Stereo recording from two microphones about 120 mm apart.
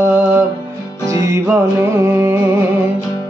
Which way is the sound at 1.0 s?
25° right (ahead or behind).